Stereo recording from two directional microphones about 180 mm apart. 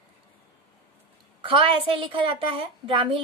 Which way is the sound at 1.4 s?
30° right (ahead or behind).